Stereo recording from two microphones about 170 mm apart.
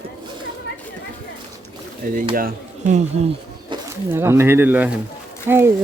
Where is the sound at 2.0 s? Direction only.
55° right (ahead or behind).